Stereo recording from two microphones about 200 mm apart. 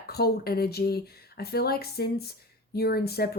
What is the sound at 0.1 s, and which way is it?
Speech, 50° left (ahead or behind).